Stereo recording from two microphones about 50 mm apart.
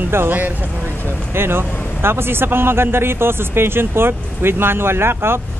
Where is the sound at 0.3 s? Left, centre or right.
Right.